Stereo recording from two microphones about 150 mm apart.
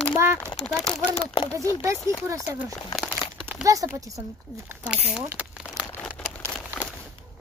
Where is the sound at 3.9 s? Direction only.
20° right (ahead or behind).